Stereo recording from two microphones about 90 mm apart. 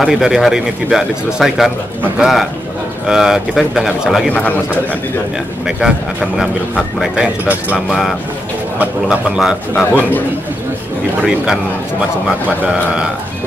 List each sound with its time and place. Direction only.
0.0 s speech: 5° right (ahead or behind)
4.3 s a man's voice: 15° left (ahead or behind)
5.8 s speech: 5° right (ahead or behind)
9.4 s speech: 5° right (ahead or behind)
12.3 s speech: 10° right (ahead or behind)